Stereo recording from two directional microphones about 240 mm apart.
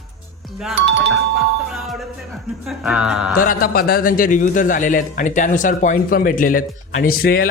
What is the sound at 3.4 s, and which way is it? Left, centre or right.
A man's voice, left.